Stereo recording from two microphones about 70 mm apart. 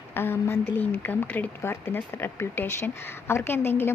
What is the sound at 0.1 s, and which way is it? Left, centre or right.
Speech, left.